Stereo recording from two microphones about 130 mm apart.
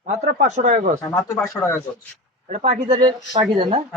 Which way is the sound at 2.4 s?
60° right (ahead or behind).